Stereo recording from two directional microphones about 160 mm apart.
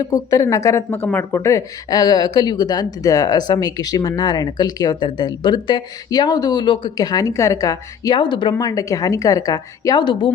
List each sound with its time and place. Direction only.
0.0 s speech: 20° left (ahead or behind)